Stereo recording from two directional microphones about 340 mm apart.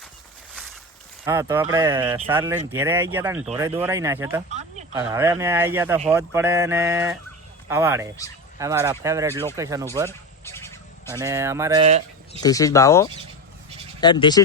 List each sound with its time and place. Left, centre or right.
1.2 s speech: centre
4.4 s a sound: centre
5.0 s speech: centre
10.1 s a sound: centre
11.2 s speech: centre
12.4 s speech: centre